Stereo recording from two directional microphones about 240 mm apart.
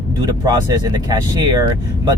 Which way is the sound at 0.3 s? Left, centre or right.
Centre.